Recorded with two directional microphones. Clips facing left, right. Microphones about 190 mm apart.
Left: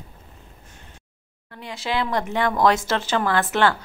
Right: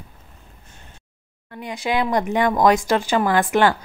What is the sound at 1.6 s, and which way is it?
Speech, 15° right (ahead or behind).